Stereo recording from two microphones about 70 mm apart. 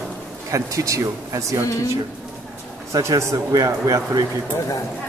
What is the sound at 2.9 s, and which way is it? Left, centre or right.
Speech, right.